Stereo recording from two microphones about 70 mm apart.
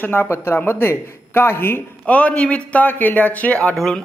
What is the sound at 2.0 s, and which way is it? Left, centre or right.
Speech, centre.